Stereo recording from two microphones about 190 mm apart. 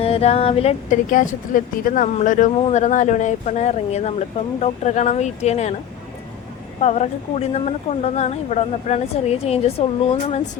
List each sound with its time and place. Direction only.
0.0 s speech: 30° left (ahead or behind)
6.8 s speech: 35° left (ahead or behind)